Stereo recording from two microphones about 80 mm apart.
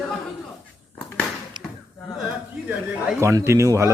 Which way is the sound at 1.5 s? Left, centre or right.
Right.